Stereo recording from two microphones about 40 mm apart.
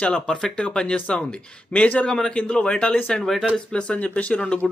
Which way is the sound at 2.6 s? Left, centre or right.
Left.